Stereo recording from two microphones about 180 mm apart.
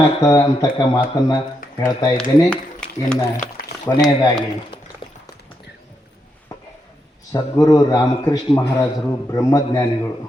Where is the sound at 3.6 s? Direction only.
55° left (ahead or behind).